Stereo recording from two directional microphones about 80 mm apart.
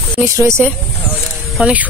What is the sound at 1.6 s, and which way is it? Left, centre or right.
Speech, centre.